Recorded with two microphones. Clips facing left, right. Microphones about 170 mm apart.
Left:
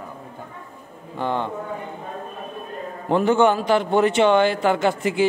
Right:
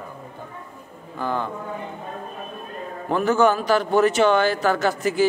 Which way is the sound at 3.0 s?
25° left (ahead or behind).